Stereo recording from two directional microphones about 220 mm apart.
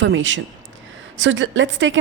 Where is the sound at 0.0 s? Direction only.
55° right (ahead or behind).